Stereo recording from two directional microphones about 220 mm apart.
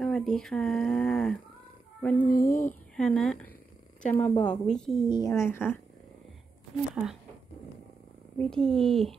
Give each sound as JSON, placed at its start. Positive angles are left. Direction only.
{"t": 0.0, "sound": "speech", "side_deg": 0}
{"t": 2.0, "sound": "a sound", "side_deg": 5}
{"t": 2.2, "sound": "speech", "side_deg": 40}
{"t": 3.0, "sound": "speech", "side_deg": 5}
{"t": 5.1, "sound": "speech", "side_deg": 15}
{"t": 8.4, "sound": "speech", "side_deg": 5}